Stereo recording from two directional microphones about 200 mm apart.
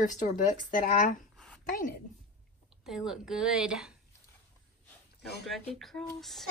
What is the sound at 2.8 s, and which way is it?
A woman's voice, centre (ahead or behind).